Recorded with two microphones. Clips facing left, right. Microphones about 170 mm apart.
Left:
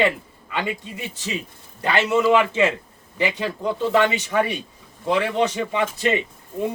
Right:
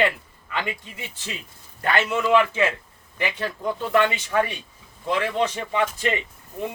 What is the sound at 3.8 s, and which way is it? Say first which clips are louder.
Speech: left 2 dB; 20° left (ahead or behind).